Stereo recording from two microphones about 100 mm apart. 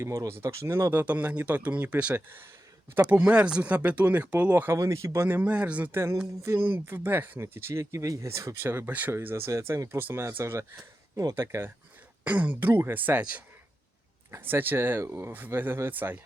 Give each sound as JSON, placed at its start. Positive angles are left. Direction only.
{"t": 0.0, "sound": "speech", "side_deg": -30}
{"t": 4.8, "sound": "speech", "side_deg": -35}
{"t": 5.4, "sound": "speech", "side_deg": -15}